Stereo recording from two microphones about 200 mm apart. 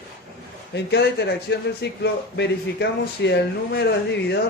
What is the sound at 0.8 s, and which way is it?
A man's voice, 60° left (ahead or behind).